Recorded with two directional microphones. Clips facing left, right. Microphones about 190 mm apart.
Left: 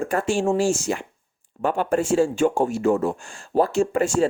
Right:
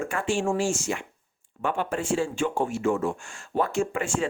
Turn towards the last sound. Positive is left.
turn(degrees=40)  # may be behind; listen again after turning